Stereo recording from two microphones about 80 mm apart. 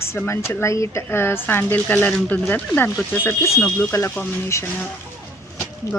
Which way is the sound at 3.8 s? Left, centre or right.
Left.